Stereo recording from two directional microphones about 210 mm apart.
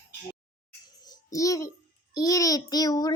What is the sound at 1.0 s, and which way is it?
A child's voice, 15° left (ahead or behind).